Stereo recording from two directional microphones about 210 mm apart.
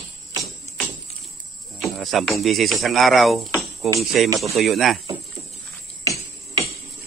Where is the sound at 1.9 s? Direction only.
Centre (ahead or behind).